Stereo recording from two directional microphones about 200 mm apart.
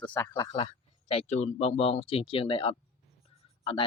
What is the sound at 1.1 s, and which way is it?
Speech, 30° left (ahead or behind).